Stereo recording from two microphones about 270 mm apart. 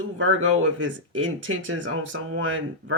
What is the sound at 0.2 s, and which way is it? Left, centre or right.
Speech, right.